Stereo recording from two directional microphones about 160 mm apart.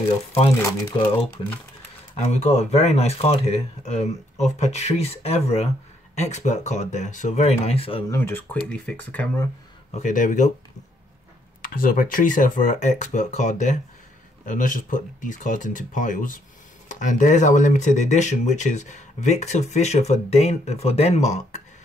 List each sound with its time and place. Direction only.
0.6 s speech: 20° left (ahead or behind)
0.9 s speech: 35° left (ahead or behind)
8.1 s speech: 15° left (ahead or behind)
9.8 s speech: 50° left (ahead or behind)
11.6 s speech: 65° left (ahead or behind); by 21.6 s 45° left (ahead or behind)